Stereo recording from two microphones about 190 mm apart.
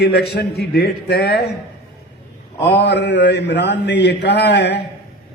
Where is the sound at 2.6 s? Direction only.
65° left (ahead or behind).